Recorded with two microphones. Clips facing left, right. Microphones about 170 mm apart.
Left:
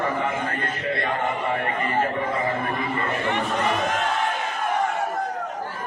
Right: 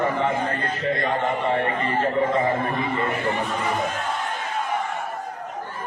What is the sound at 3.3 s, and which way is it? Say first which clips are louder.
Speech: left 1 dB; 90° left.